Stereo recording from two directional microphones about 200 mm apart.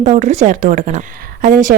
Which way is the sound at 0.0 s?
35° right (ahead or behind).